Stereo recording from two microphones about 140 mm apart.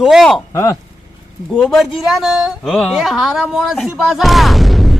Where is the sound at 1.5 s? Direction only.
5° left (ahead or behind).